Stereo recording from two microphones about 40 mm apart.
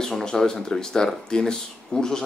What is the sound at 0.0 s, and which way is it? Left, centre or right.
Speech, centre.